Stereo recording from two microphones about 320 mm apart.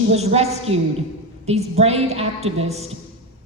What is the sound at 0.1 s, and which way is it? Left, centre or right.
A woman's voice, centre.